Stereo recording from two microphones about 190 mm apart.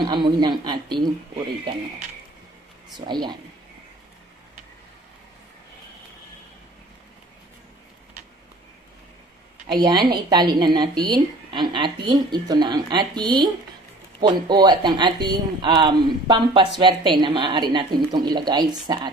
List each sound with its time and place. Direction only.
0.0 s speech: 25° right (ahead or behind)
0.6 s a sound: 25° right (ahead or behind)
1.7 s speech: 25° right (ahead or behind)
3.1 s speech: 25° right (ahead or behind)
9.7 s speech: 20° right (ahead or behind)